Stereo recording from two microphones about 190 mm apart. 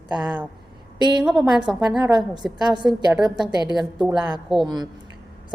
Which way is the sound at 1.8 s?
20° right (ahead or behind).